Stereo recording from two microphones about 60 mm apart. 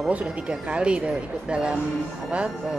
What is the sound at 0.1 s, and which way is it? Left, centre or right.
A woman's voice, centre.